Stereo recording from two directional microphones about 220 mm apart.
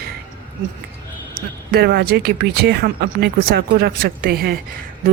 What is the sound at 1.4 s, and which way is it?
Speech, 45° right (ahead or behind).